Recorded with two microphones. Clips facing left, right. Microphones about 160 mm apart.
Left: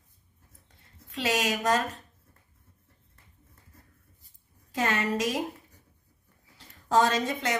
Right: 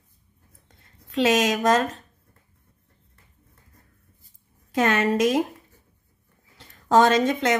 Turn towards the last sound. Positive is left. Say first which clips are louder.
# right 8 dB
turn(degrees=-90)